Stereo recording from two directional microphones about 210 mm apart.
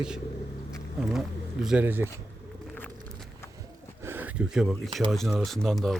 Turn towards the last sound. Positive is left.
turn(degrees=0)  # may be behind; listen again after turning